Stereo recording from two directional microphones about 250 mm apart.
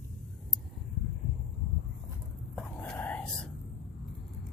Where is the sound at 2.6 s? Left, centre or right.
Centre.